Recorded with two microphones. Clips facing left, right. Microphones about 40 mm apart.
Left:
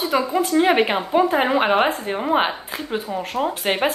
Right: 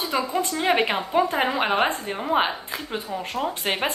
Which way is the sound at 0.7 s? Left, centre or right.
Centre.